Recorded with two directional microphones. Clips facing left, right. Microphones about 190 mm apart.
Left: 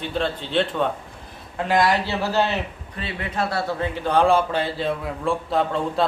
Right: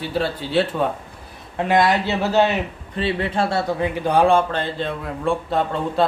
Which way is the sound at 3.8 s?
15° right (ahead or behind).